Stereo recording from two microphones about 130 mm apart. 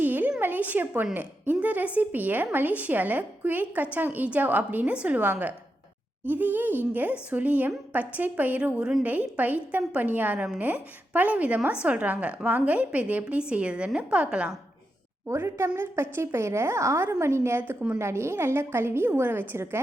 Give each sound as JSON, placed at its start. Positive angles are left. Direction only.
{"t": 0.0, "sound": "a woman's voice", "side_deg": -15}
{"t": 15.3, "sound": "a woman's voice", "side_deg": -20}